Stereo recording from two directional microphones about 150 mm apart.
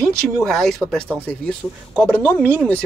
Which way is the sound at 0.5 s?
5° left (ahead or behind).